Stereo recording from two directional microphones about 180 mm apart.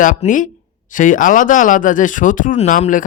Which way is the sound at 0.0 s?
45° left (ahead or behind).